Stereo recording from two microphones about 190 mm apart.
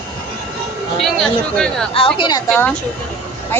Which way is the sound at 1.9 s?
30° left (ahead or behind).